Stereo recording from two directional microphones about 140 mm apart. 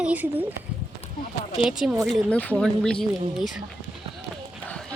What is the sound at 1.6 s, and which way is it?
Speech, centre (ahead or behind).